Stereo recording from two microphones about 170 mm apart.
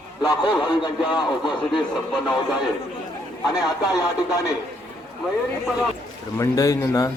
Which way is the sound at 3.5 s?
20° left (ahead or behind).